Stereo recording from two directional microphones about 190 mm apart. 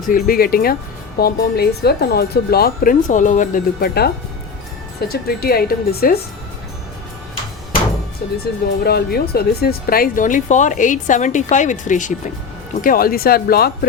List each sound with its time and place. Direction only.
0.0 s speech: 45° left (ahead or behind)
8.2 s a woman's voice: 55° left (ahead or behind)